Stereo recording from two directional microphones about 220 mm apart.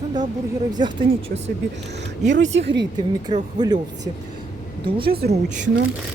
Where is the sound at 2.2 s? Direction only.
55° right (ahead or behind).